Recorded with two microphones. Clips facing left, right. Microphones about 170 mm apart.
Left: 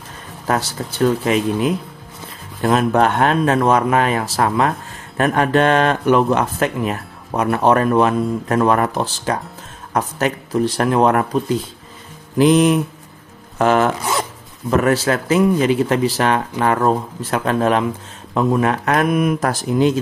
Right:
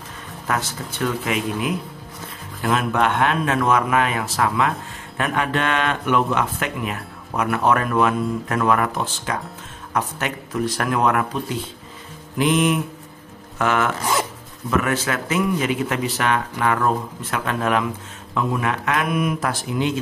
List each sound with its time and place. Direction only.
0.5 s speech: 35° left (ahead or behind)
12.4 s speech: 35° left (ahead or behind)